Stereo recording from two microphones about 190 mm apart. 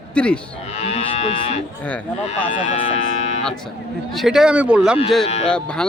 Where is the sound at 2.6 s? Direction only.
40° left (ahead or behind).